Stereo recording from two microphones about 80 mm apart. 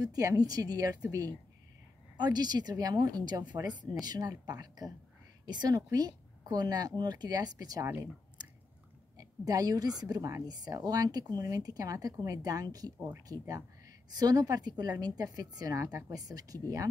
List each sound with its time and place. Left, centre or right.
0.0 s a woman's voice: right
7.8 s speech: right
9.1 s a woman's voice: right
15.8 s speech: right
16.1 s a woman's voice: right